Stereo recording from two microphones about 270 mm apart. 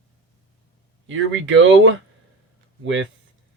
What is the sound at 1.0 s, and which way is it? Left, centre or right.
Speech, right.